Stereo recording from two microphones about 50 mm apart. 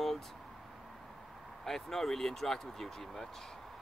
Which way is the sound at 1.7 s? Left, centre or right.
Centre.